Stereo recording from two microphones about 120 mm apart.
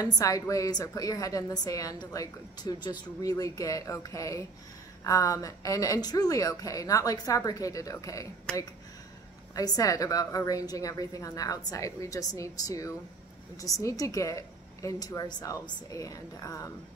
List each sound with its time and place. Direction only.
0.0 s a woman's voice: 30° left (ahead or behind)
8.5 s speech: 5° left (ahead or behind)
9.6 s a woman's voice: 30° left (ahead or behind)